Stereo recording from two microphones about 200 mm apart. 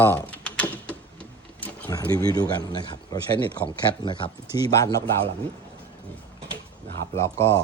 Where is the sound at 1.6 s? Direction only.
10° left (ahead or behind).